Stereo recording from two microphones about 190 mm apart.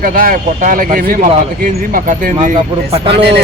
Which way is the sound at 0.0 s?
50° right (ahead or behind).